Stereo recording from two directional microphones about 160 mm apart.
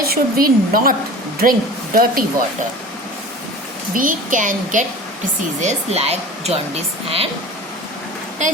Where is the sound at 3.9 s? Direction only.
55° right (ahead or behind).